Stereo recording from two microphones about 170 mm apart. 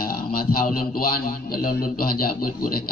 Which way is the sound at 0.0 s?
60° left (ahead or behind).